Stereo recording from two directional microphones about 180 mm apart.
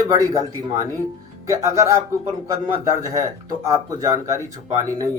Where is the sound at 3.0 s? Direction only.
20° right (ahead or behind).